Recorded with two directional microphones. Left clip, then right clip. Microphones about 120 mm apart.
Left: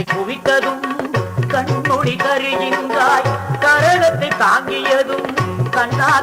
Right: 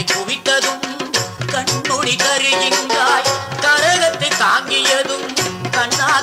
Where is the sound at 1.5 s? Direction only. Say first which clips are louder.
Left 2 dB; 30° left (ahead or behind).